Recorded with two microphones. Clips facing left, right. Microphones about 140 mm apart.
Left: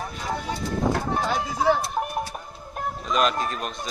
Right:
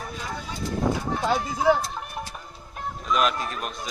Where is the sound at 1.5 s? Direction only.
55° left (ahead or behind).